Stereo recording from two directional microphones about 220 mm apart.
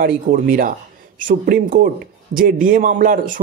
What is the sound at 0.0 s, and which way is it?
A man's voice, 40° right (ahead or behind).